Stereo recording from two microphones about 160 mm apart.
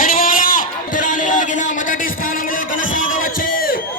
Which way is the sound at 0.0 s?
60° left (ahead or behind).